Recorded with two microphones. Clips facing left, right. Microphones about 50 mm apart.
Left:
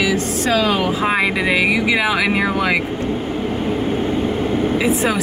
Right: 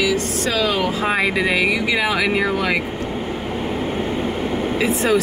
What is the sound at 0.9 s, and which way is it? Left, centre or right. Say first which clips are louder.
Speech: left 2 dB; centre.